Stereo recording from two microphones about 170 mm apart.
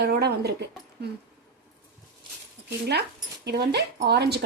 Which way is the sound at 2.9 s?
75° right (ahead or behind).